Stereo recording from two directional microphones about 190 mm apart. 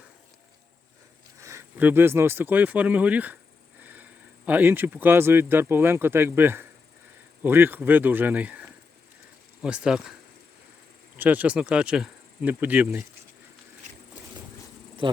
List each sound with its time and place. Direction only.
1.4 s speech: 15° right (ahead or behind)
3.8 s a sound: 10° right (ahead or behind)
4.4 s speech: 10° right (ahead or behind)
11.2 s speech: 10° right (ahead or behind)
15.0 s speech: 25° right (ahead or behind)